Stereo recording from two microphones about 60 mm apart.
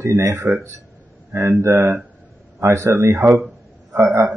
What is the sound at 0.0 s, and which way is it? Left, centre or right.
Speech, right.